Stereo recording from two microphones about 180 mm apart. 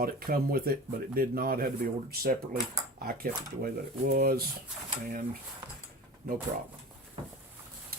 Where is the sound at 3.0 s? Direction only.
55° right (ahead or behind).